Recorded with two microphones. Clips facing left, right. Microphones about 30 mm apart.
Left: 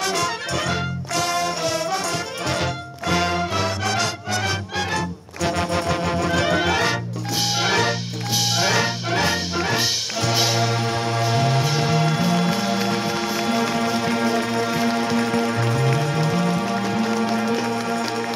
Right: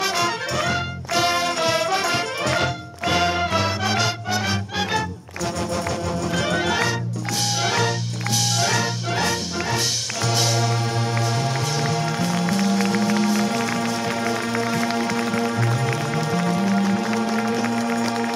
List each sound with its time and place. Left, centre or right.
0.0 s music: centre
0.6 s music: centre
1.1 s music: right
2.6 s music: centre
5.6 s music: left
6.3 s music: centre
15.9 s music: centre